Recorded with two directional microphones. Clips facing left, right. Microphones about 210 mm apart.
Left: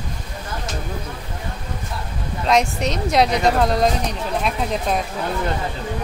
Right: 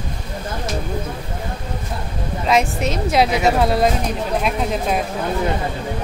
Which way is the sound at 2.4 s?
5° right (ahead or behind).